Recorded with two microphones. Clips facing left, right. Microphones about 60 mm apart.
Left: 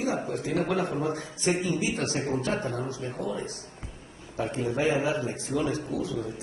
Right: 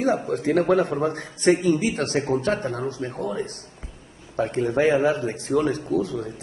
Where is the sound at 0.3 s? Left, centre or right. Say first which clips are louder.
Right 8 dB; right.